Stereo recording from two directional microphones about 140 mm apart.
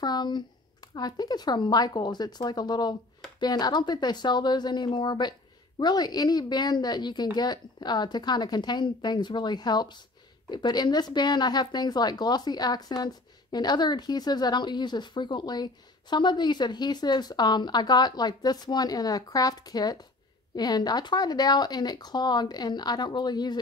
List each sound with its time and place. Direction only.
0.0 s a woman's voice: 30° left (ahead or behind)